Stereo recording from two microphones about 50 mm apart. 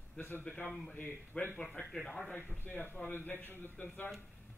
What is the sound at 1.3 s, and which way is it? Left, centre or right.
Speech, left.